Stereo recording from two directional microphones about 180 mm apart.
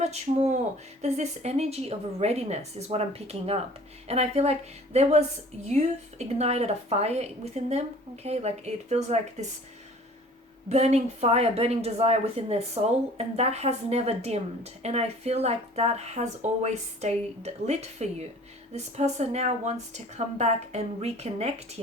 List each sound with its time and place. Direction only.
0.0 s speech: 40° right (ahead or behind)
5.6 s speech: 40° right (ahead or behind)
10.7 s speech: 35° right (ahead or behind)